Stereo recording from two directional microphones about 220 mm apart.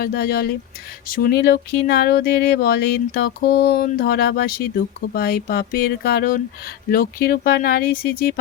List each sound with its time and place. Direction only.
0.0 s speech: 45° left (ahead or behind)